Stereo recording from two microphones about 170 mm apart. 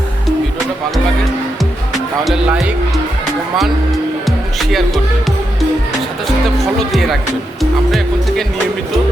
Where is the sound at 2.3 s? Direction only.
5° right (ahead or behind).